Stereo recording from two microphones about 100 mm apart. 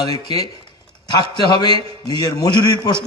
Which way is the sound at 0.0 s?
35° left (ahead or behind).